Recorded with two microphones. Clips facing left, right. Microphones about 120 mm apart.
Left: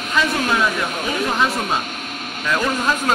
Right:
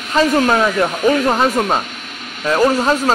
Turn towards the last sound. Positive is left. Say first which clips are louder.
# right 6 dB
turn(degrees=-35)  # may be behind; listen again after turning